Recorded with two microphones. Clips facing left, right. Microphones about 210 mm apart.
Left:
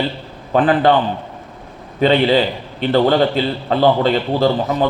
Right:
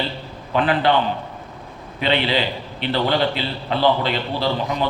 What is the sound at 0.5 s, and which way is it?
Speech, 50° left (ahead or behind).